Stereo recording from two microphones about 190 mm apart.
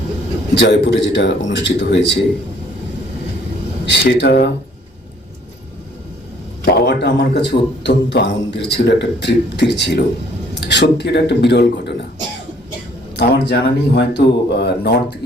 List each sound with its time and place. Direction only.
0.5 s speech: 65° left (ahead or behind)
3.8 s speech: 65° left (ahead or behind)
6.7 s speech: 60° left (ahead or behind)
13.1 s speech: 65° left (ahead or behind)